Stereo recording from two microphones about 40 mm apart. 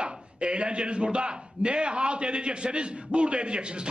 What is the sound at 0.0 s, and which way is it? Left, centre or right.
A man's voice, right.